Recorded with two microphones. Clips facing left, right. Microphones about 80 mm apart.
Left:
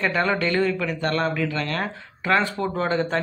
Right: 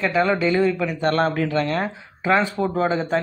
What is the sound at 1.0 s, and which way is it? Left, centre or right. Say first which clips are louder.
Speech: right 3 dB; right.